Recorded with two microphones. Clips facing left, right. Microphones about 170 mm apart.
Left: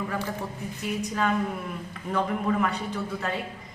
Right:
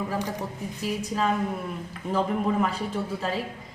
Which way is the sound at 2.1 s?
30° right (ahead or behind).